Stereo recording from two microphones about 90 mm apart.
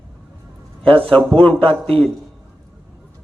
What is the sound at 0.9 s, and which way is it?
Speech, 80° right.